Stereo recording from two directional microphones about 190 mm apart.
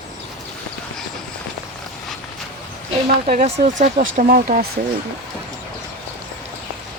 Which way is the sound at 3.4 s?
35° right (ahead or behind).